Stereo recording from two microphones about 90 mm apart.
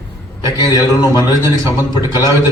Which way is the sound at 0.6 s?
50° left (ahead or behind).